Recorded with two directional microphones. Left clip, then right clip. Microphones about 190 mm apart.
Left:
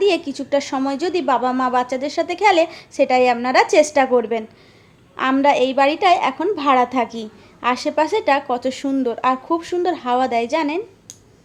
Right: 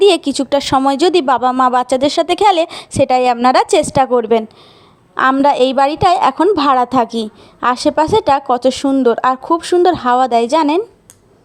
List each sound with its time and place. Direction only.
0.0 s a woman's voice: 45° right (ahead or behind)